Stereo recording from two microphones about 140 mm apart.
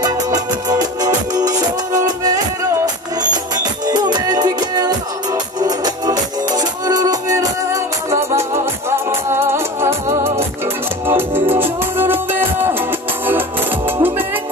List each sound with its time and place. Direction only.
0.7 s music: 25° right (ahead or behind)